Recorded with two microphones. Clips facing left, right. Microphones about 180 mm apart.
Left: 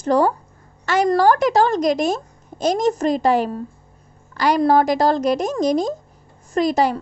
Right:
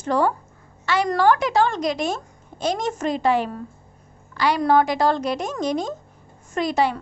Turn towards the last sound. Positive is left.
turn(degrees=40)  # may be behind; listen again after turning